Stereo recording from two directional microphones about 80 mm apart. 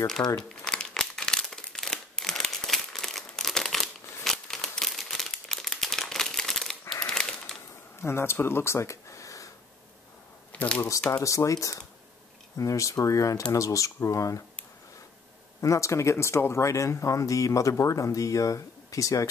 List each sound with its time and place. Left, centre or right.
0.0 s speech: centre
0.4 s crumpling: centre
7.1 s a sound: centre
8.0 s speech: left
10.5 s shuffling cards: centre
11.1 s speech: left
15.6 s speech: left